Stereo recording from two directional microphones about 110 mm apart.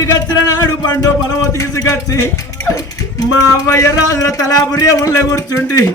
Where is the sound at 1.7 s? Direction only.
30° left (ahead or behind).